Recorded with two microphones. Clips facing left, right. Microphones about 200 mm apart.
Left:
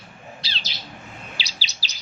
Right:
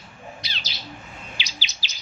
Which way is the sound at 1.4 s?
35° left (ahead or behind).